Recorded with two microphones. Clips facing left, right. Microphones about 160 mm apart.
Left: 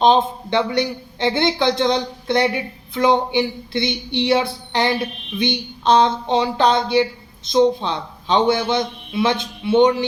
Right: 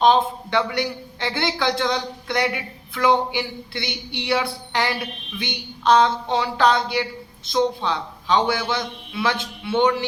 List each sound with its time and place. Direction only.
0.0 s a man's voice: 25° left (ahead or behind)